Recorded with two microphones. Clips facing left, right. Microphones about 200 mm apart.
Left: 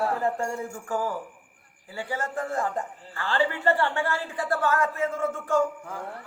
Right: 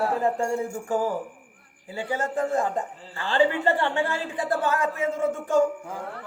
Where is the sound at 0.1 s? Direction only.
20° right (ahead or behind).